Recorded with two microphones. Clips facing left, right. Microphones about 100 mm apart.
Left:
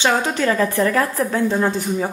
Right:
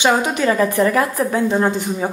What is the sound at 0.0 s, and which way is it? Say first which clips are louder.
A woman's voice: right 2 dB; 15° right (ahead or behind).